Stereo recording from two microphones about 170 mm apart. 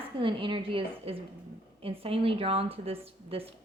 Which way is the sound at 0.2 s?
30° right (ahead or behind).